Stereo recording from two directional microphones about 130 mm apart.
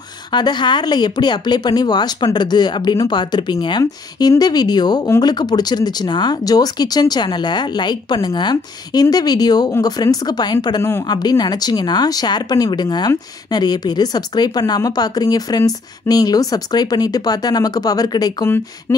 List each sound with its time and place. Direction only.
0.3 s speech: 35° left (ahead or behind)
10.8 s speech: 20° left (ahead or behind)
11.1 s speech: 30° left (ahead or behind)
18.9 s a sound: 20° left (ahead or behind)